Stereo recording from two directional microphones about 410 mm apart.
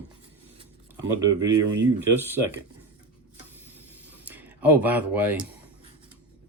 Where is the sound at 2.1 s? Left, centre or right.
Centre.